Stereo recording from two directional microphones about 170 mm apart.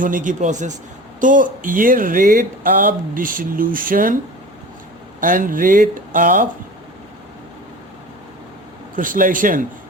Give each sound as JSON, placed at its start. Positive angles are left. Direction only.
{"t": 0.0, "sound": "speech", "side_deg": -50}
{"t": 5.2, "sound": "speech", "side_deg": -55}
{"t": 9.0, "sound": "speech", "side_deg": -50}